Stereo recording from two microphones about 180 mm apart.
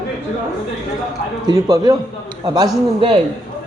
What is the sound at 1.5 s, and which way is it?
Speech, 20° right (ahead or behind).